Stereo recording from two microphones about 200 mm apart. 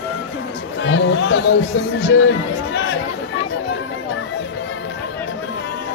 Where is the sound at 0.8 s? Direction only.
65° left (ahead or behind).